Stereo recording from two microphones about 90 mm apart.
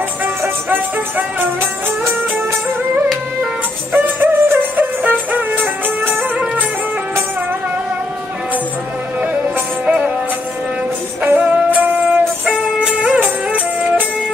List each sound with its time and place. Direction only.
0.2 s music: 20° right (ahead or behind)
4.0 s music: 20° right (ahead or behind)
9.8 s music: 15° right (ahead or behind)
11.2 s music: 15° right (ahead or behind)